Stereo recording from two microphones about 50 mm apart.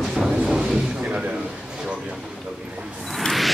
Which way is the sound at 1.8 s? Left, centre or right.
Right.